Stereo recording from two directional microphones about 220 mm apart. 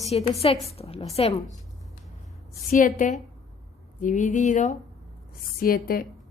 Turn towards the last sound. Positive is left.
turn(degrees=40)  # may be behind; listen again after turning